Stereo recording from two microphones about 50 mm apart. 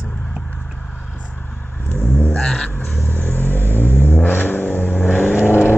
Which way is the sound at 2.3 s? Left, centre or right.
Centre.